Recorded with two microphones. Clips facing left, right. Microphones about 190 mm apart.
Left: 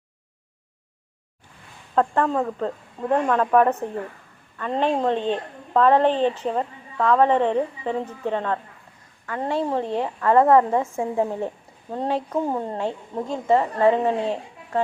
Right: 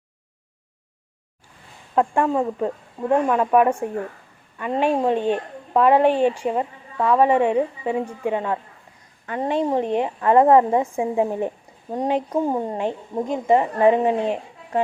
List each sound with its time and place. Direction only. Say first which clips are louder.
2.0 s a woman's voice: right 1 dB; 10° right (ahead or behind)